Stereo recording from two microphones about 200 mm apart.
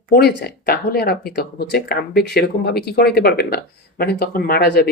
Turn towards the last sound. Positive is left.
turn(degrees=50)  # may be behind; listen again after turning